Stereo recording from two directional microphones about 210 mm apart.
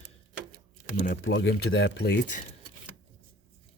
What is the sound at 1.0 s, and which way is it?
Speech, 45° left (ahead or behind).